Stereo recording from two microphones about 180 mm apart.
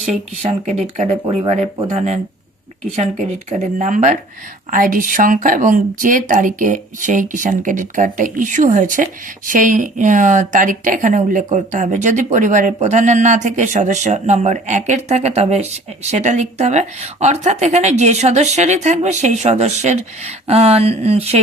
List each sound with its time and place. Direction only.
0.1 s speech: 40° right (ahead or behind)
2.9 s speech: 40° right (ahead or behind)